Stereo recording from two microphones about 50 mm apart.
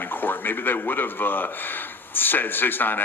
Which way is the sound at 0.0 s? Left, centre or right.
Left.